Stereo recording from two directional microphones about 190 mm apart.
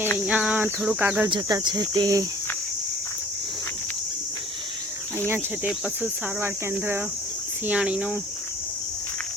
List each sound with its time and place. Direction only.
0.3 s cricket: 5° right (ahead or behind)
1.3 s speech: 20° right (ahead or behind)
5.3 s cricket: 5° right (ahead or behind)
7.7 s speech: 5° right (ahead or behind)